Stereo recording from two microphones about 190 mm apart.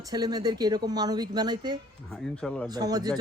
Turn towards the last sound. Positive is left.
turn(degrees=-20)  # may be behind; listen again after turning